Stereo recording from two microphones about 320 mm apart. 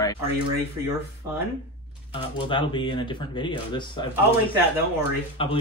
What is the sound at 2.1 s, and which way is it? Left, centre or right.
Speech, centre.